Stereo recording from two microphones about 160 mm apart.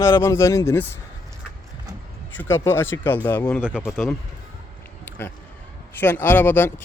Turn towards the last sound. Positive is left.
turn(degrees=15)  # may be behind; listen again after turning